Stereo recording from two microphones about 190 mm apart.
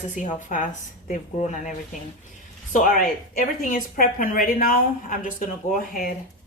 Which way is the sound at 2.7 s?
45° left (ahead or behind).